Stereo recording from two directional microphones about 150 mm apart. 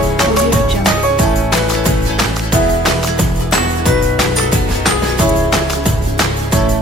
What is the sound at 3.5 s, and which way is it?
Music, centre (ahead or behind).